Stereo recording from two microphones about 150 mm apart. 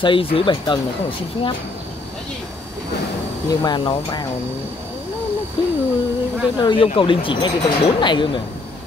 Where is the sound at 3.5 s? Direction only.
25° left (ahead or behind).